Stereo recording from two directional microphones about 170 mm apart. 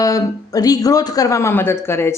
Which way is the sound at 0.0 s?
20° left (ahead or behind).